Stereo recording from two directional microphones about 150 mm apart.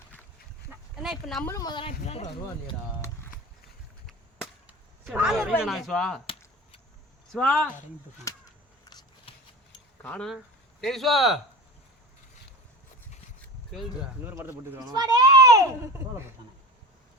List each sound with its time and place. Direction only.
1.0 s speech: centre (ahead or behind)
1.5 s speech: 20° left (ahead or behind)
1.9 s speech: 50° left (ahead or behind)
4.6 s a sound: 10° right (ahead or behind)
5.6 s speech: centre (ahead or behind)
7.3 s speech: 5° left (ahead or behind)
8.3 s a sound: 20° left (ahead or behind)
8.9 s shuffling cards: 30° left (ahead or behind)
10.0 s speech: 10° left (ahead or behind)
14.3 s speech: 15° right (ahead or behind)
14.8 s a child's voice: 25° right (ahead or behind)